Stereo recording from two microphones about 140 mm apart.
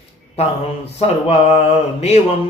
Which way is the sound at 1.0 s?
45° left (ahead or behind).